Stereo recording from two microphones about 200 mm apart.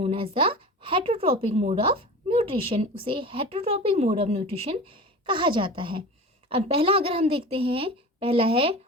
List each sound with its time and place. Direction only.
0.0 s speech: 25° right (ahead or behind)